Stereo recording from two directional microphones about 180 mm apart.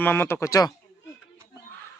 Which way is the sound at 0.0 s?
10° left (ahead or behind).